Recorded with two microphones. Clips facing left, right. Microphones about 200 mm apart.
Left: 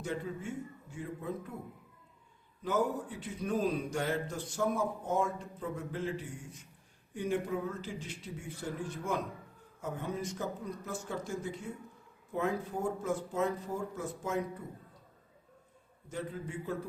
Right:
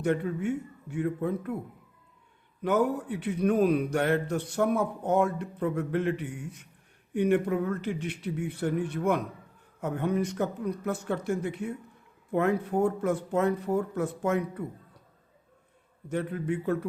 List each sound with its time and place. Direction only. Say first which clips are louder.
0.0 s a man's voice: right 10 dB; 65° right (ahead or behind)
2.6 s a man's voice: right 6 dB; 65° right (ahead or behind)
16.0 s a man's voice: right 9 dB; 65° right (ahead or behind)